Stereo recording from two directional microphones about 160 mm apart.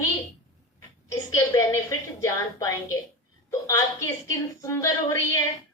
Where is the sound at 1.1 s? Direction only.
20° left (ahead or behind).